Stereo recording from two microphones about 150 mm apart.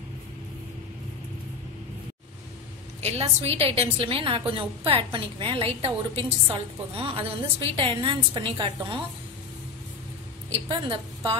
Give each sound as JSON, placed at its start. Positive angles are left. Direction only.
{"t": 3.0, "sound": "a woman's voice", "side_deg": -45}
{"t": 10.7, "sound": "a woman's voice", "side_deg": -35}